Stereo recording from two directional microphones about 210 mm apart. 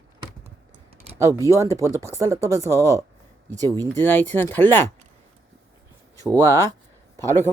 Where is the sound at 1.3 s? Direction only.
15° left (ahead or behind).